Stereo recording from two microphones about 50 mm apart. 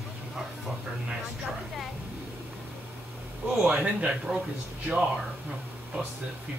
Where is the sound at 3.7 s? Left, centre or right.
Right.